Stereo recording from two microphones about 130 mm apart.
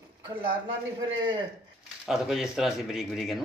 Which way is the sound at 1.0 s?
40° right (ahead or behind).